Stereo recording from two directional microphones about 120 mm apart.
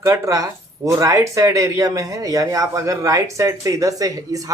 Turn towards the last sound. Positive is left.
turn(degrees=-30)  # may be behind; listen again after turning